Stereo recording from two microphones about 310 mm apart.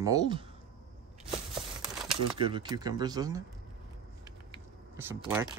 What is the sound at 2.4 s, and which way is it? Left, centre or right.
Speech, centre.